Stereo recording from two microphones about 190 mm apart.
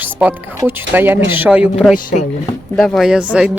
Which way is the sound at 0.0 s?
10° right (ahead or behind).